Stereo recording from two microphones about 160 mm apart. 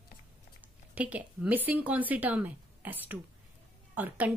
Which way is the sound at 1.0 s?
10° right (ahead or behind).